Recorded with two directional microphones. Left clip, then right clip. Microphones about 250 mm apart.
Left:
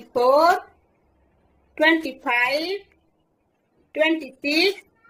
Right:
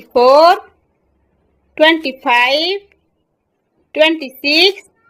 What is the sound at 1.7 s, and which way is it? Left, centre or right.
A woman's voice, right.